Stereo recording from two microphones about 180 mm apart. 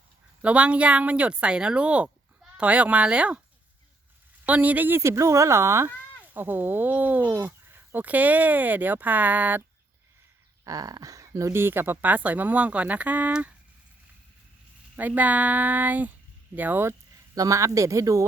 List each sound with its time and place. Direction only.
0.4 s speech: 5° right (ahead or behind)
4.4 s speech: 10° right (ahead or behind)
10.6 s speech: 20° right (ahead or behind)
14.9 s speech: 10° right (ahead or behind)